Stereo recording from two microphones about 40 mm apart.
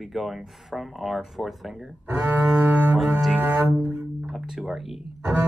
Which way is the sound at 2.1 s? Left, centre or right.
Right.